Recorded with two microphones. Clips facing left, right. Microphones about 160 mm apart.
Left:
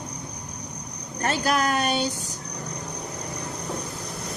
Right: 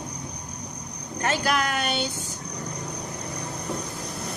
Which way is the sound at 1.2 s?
40° left (ahead or behind).